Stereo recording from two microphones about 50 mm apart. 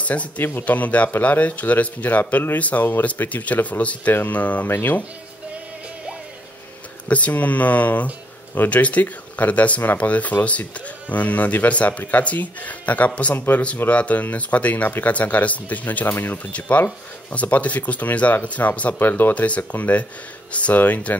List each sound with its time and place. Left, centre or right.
0.0 s speech: left
7.1 s speech: left
18.9 s speech: left
19.3 s speech: left